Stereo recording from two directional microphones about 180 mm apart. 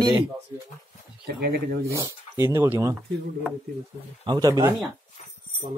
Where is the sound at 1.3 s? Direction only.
60° right (ahead or behind).